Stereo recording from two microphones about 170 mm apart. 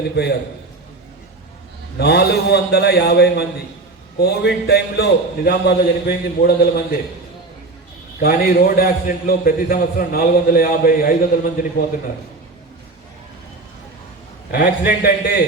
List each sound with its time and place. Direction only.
0.2 s a man's voice: 65° left (ahead or behind)
2.0 s a man's voice: 70° left (ahead or behind)
8.2 s a man's voice: 60° left (ahead or behind)
14.5 s a man's voice: 60° left (ahead or behind)